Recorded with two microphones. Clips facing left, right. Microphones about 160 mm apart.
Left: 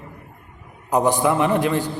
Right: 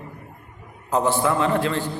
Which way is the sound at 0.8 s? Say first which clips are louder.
Left 2 dB; 15° left (ahead or behind).